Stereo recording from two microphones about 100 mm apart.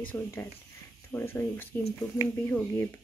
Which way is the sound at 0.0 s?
20° left (ahead or behind).